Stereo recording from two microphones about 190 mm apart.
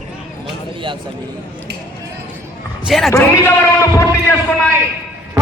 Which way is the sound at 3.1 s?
15° left (ahead or behind).